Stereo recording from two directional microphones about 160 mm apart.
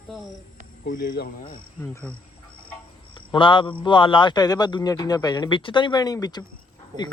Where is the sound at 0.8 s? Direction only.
60° left (ahead or behind).